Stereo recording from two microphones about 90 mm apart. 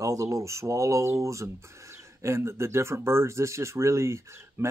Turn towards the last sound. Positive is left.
turn(degrees=-35)  # may be behind; listen again after turning